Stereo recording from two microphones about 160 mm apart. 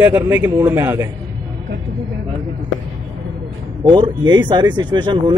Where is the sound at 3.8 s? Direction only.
30° right (ahead or behind).